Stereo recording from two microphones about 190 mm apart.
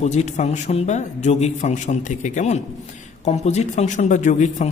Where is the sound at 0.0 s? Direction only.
35° left (ahead or behind).